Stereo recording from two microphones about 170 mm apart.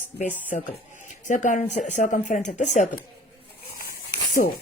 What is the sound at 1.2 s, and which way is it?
Speech, 50° left (ahead or behind).